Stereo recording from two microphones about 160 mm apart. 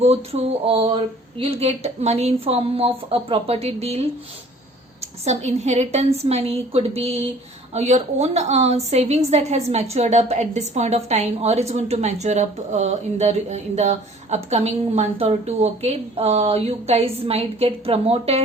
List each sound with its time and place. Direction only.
0.0 s a woman's voice: 40° right (ahead or behind)